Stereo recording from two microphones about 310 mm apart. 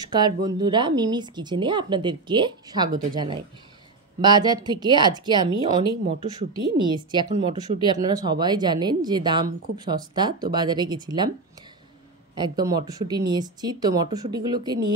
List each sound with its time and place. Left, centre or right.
0.0 s speech: centre
4.2 s speech: centre
12.4 s speech: centre